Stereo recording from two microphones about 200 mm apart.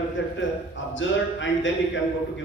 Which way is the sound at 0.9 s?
70° left (ahead or behind).